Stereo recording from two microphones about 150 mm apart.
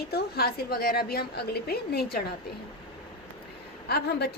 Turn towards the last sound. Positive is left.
turn(degrees=90)